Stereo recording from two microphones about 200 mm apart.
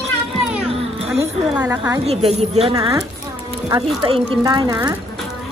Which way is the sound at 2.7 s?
15° right (ahead or behind).